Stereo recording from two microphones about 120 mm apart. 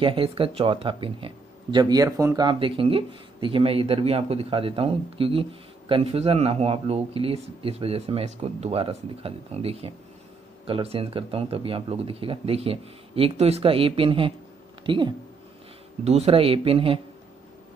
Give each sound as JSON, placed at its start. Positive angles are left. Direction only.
{"t": 0.0, "sound": "speech", "side_deg": -50}
{"t": 1.8, "sound": "speech", "side_deg": -30}
{"t": 2.4, "sound": "speech", "side_deg": -45}
{"t": 16.0, "sound": "speech", "side_deg": -60}